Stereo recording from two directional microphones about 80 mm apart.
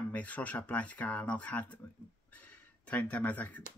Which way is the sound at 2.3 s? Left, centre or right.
Centre.